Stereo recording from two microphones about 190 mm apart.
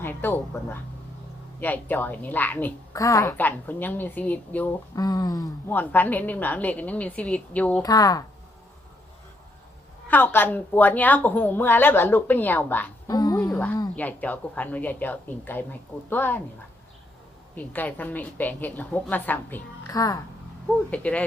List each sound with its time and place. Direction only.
0.0 s a woman's voice: 10° left (ahead or behind)
4.9 s a woman's voice: 20° left (ahead or behind)
7.8 s speech: 20° left (ahead or behind)
10.1 s a woman's voice: 10° left (ahead or behind)
13.1 s a sound: 20° left (ahead or behind)
13.4 s a sound: 5° left (ahead or behind)
13.9 s a woman's voice: 10° left (ahead or behind)
17.5 s a woman's voice: 10° left (ahead or behind)
20.9 s a woman's voice: 5° left (ahead or behind)